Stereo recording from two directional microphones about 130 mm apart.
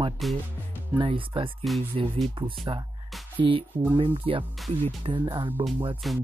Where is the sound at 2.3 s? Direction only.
40° right (ahead or behind).